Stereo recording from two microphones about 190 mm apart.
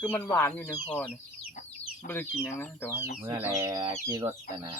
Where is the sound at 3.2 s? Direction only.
15° right (ahead or behind).